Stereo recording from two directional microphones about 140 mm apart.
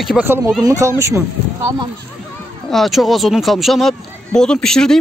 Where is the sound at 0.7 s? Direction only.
25° right (ahead or behind).